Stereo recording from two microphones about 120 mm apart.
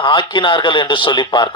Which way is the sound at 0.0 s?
40° left (ahead or behind).